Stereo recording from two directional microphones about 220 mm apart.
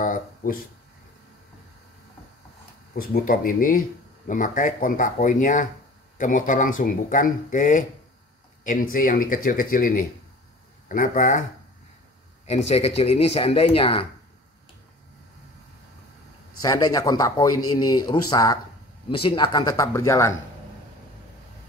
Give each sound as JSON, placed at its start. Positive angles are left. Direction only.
{"t": 0.0, "sound": "a sound", "side_deg": 40}
{"t": 2.9, "sound": "speech", "side_deg": 40}
{"t": 8.9, "sound": "speech", "side_deg": 40}
{"t": 12.4, "sound": "speech", "side_deg": 30}
{"t": 16.6, "sound": "speech", "side_deg": 15}